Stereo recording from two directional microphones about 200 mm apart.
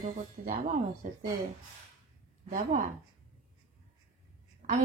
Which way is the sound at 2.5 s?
35° right (ahead or behind).